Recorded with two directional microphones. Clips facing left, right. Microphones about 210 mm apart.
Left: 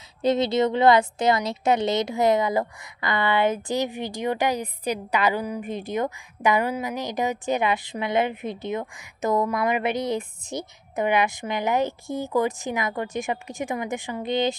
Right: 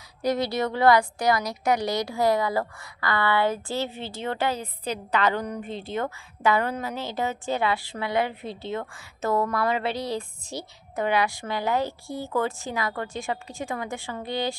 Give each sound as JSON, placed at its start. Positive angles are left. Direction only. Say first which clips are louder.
{"t": 0.2, "sound": "a woman's voice", "louder": "left 4 dB", "side_deg": 25}